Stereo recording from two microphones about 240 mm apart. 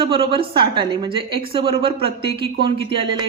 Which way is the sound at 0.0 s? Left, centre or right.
Right.